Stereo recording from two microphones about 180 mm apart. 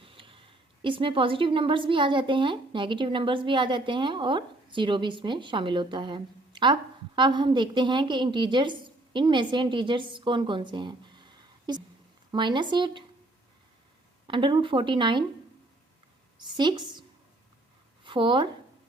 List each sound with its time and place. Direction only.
0.0 s a woman's voice: 30° right (ahead or behind)
14.3 s speech: 25° right (ahead or behind)
16.4 s speech: 25° right (ahead or behind)
18.0 s speech: 25° right (ahead or behind)